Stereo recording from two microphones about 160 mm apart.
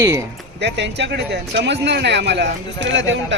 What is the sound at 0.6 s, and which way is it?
Speech, 90° right.